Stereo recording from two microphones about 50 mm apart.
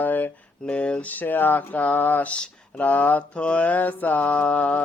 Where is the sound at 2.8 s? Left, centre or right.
Left.